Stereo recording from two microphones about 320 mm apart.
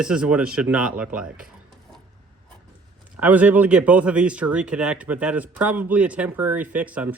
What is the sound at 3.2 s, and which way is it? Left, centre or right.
Speech, centre.